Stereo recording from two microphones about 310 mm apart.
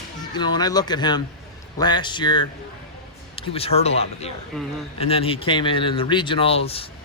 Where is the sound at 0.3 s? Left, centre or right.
Centre.